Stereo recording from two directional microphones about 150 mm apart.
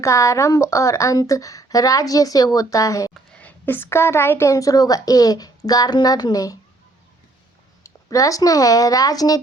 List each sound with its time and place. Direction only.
0.0 s a woman's voice: 20° left (ahead or behind)
3.2 s a woman's voice: 10° left (ahead or behind); by 6.6 s 25° left (ahead or behind)
7.9 s a woman's voice: 20° left (ahead or behind)